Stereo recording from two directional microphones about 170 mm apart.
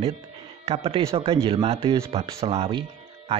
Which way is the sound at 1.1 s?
35° right (ahead or behind).